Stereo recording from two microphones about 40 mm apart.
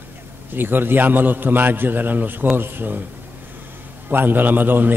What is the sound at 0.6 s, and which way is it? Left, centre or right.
A man's voice, right.